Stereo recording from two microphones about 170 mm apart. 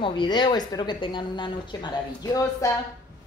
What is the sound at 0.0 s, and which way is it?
Speech, 25° left (ahead or behind).